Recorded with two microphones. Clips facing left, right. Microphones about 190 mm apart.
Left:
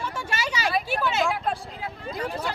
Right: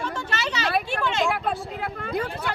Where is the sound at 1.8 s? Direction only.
65° right (ahead or behind).